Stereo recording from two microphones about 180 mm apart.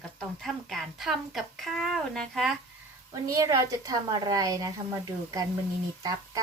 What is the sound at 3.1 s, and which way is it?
A woman's voice, 20° right (ahead or behind).